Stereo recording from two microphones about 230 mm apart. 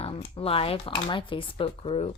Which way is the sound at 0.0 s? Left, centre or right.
Left.